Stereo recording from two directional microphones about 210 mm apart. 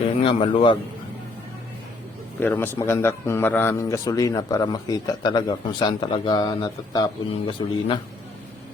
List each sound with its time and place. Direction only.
0.2 s speech: 25° left (ahead or behind)
2.4 s a man's voice: 10° left (ahead or behind)